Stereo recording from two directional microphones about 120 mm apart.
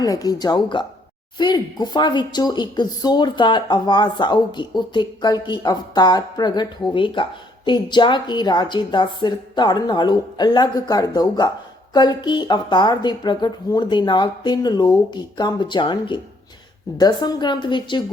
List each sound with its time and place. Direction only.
0.0 s speech: 30° left (ahead or behind)